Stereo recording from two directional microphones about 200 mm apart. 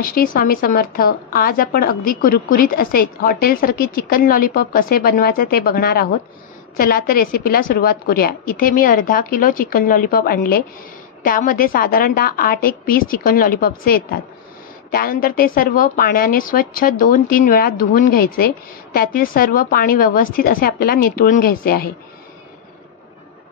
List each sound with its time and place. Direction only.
0.0 s speech: 45° left (ahead or behind)